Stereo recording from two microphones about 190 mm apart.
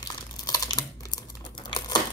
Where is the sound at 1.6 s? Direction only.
20° left (ahead or behind).